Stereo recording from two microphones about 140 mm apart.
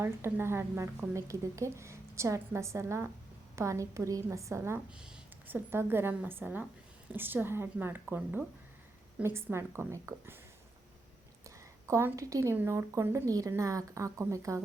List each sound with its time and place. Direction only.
0.0 s speech: 15° right (ahead or behind)
4.9 s a woman's voice: 5° right (ahead or behind)
11.4 s speech: 20° right (ahead or behind)